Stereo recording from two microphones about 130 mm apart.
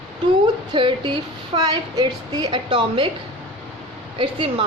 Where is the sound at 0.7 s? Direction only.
40° right (ahead or behind).